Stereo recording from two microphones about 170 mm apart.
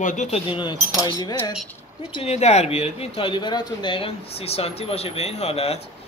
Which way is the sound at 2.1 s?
40° left (ahead or behind).